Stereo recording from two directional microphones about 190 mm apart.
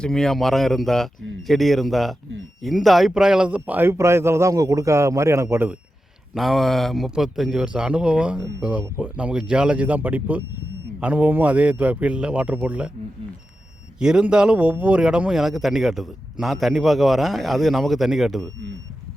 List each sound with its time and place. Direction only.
0.0 s a man's voice: centre (ahead or behind)
6.3 s a man's voice: centre (ahead or behind)
14.0 s a man's voice: 5° right (ahead or behind)